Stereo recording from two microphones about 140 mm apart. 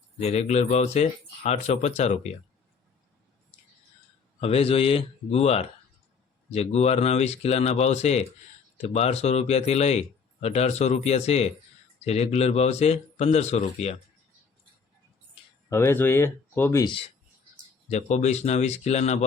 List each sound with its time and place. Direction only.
0.2 s speech: 50° left (ahead or behind)
4.4 s speech: 45° left (ahead or behind)
15.7 s speech: 20° left (ahead or behind)
16.8 s speech: 40° left (ahead or behind)
17.8 s speech: 55° left (ahead or behind)